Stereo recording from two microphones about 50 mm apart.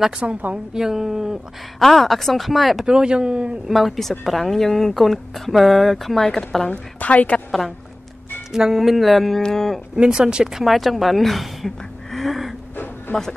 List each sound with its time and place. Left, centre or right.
0.2 s speech: right
0.7 s speech: centre
1.8 s speech: centre
2.9 s speech: centre
3.6 s speech: centre
6.7 s a woman's voice: left
8.5 s speech: centre
9.9 s speech: centre
10.6 s a woman's voice: centre
13.1 s a woman's voice: left